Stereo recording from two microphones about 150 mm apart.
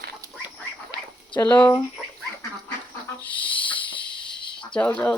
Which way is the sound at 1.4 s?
15° left (ahead or behind).